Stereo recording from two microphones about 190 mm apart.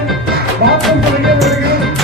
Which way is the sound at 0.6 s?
55° right (ahead or behind).